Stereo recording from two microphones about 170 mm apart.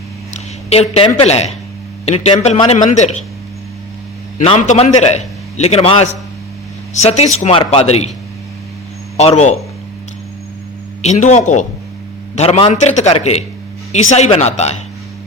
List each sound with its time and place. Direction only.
0.3 s a man's voice: 35° left (ahead or behind)
4.4 s a man's voice: 45° left (ahead or behind)
9.1 s a man's voice: 40° left (ahead or behind)
11.0 s a man's voice: 40° left (ahead or behind)